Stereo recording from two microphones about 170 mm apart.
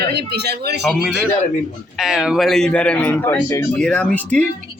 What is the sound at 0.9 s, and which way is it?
A man's voice, centre (ahead or behind).